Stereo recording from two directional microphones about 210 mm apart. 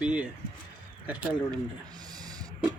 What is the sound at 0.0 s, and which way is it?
Speech, 5° right (ahead or behind).